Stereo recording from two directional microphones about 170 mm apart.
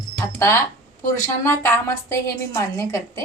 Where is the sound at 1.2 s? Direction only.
15° left (ahead or behind).